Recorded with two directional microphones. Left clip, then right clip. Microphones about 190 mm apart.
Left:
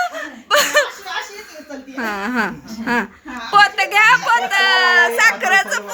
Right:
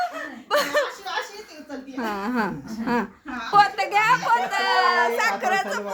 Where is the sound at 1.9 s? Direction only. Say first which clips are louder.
Left 6 dB; centre (ahead or behind).